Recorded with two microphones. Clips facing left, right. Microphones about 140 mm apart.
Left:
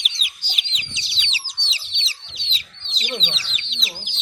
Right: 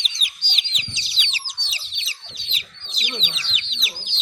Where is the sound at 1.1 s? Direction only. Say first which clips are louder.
Left 1 dB; 25° left (ahead or behind).